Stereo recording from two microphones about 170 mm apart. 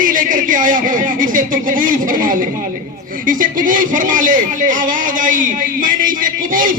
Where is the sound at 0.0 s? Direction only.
50° right (ahead or behind).